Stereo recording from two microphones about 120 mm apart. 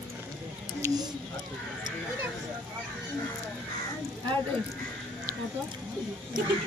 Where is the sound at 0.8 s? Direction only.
25° right (ahead or behind).